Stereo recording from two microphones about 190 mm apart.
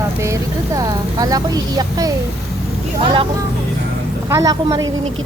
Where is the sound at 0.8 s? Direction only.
20° right (ahead or behind).